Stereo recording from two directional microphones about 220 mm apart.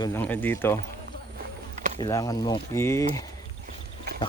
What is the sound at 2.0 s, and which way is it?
Speech, 15° left (ahead or behind).